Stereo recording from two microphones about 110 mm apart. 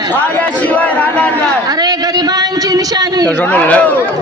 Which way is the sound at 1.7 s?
35° right (ahead or behind).